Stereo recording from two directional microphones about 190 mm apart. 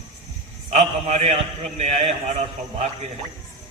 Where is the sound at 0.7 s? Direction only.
35° right (ahead or behind).